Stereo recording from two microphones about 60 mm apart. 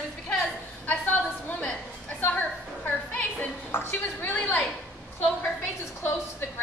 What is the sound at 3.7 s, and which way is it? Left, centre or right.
Speech, left.